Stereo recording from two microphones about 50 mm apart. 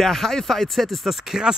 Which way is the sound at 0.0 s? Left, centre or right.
Centre.